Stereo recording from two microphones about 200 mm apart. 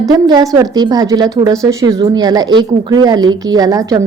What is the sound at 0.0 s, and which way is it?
A woman's voice, 20° right (ahead or behind).